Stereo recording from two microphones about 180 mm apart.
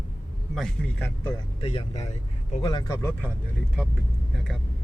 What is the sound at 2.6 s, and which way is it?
Speech, 20° left (ahead or behind).